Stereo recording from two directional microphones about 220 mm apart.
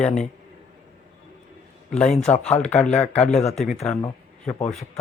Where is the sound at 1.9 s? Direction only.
5° left (ahead or behind).